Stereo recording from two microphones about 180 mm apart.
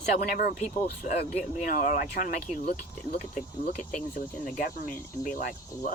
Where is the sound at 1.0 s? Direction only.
45° left (ahead or behind).